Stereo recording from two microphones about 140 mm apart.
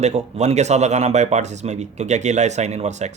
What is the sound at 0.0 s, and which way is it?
Speech, 50° right (ahead or behind).